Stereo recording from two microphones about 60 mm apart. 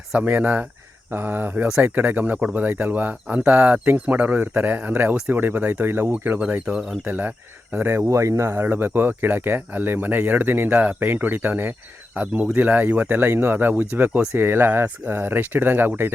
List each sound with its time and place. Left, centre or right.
0.1 s speech: right
1.1 s speech: right
8.0 s speech: right
8.6 s speech: right